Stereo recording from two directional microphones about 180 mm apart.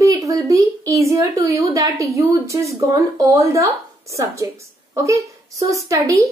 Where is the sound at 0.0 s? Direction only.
20° right (ahead or behind).